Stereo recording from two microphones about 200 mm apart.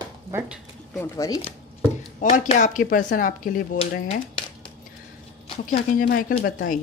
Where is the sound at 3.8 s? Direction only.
25° left (ahead or behind).